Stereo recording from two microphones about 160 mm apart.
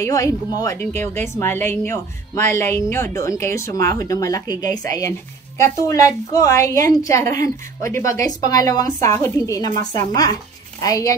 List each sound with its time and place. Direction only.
0.0 s a woman's voice: 20° left (ahead or behind)